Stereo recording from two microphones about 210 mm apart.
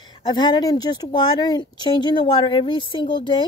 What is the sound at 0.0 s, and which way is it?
Speech, 20° left (ahead or behind).